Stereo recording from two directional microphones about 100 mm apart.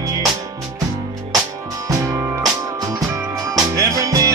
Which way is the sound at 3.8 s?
35° right (ahead or behind).